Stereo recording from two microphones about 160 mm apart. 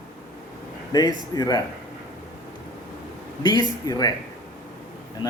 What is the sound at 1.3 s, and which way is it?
Speech, 25° left (ahead or behind).